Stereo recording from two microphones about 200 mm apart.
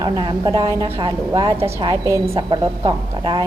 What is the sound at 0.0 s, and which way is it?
A woman's voice, 20° right (ahead or behind).